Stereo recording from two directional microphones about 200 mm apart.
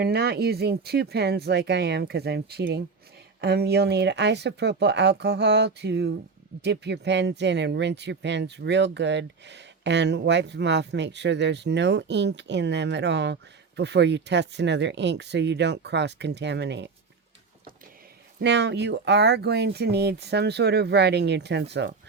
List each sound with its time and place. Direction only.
0.0 s speech: 55° right (ahead or behind)
18.3 s speech: 60° right (ahead or behind)